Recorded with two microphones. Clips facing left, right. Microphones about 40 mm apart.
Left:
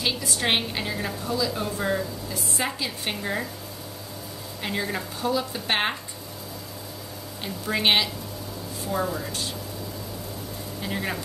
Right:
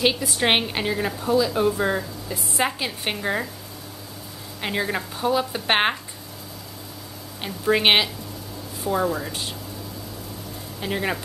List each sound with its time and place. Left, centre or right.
0.4 s a woman's voice: right
4.6 s a woman's voice: right
7.4 s a woman's voice: right
10.8 s a woman's voice: right